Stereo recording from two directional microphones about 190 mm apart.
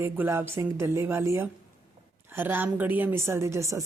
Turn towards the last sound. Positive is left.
turn(degrees=-15)  # may be behind; listen again after turning